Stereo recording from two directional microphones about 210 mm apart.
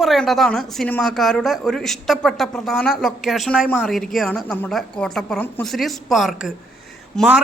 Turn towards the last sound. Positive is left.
turn(degrees=5)  # may be behind; listen again after turning